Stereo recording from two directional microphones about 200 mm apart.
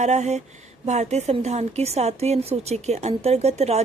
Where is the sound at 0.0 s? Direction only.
35° right (ahead or behind).